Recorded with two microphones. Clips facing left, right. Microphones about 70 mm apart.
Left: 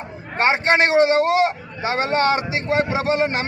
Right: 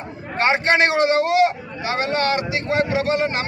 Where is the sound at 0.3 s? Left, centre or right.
Left.